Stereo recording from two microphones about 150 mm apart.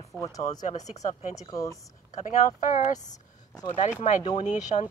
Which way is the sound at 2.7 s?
55° left (ahead or behind).